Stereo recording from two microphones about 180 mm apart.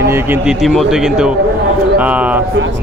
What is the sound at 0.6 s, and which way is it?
Speech, centre (ahead or behind).